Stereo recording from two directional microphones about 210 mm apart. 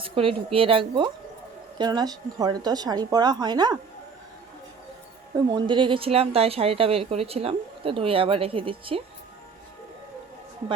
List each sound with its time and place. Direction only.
0.0 s a woman's voice: 25° right (ahead or behind)
5.3 s a woman's voice: 20° right (ahead or behind)